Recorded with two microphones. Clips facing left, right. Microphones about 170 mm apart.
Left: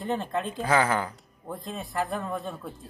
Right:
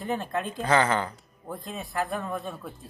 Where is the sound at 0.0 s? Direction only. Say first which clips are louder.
Left 1 dB; centre (ahead or behind).